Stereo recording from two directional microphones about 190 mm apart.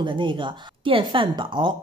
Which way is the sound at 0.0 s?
25° right (ahead or behind).